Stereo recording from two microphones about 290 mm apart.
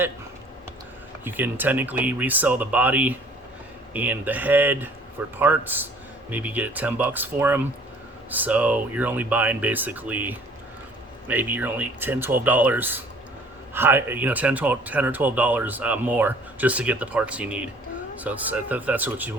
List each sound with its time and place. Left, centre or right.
1.2 s speech: centre